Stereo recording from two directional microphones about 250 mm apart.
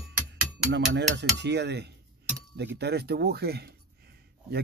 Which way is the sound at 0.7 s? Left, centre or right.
Right.